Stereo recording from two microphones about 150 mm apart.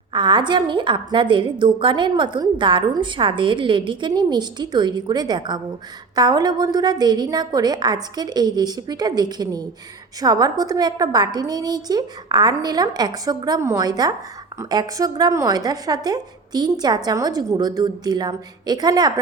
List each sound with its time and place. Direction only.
0.1 s a woman's voice: 30° right (ahead or behind)